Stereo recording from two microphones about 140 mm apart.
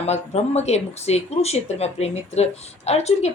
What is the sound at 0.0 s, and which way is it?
Speech, 50° left (ahead or behind).